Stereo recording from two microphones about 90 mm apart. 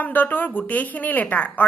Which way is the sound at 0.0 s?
20° left (ahead or behind).